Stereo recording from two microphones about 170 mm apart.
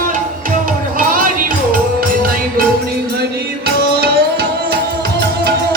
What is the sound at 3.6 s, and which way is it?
Music, 75° right (ahead or behind).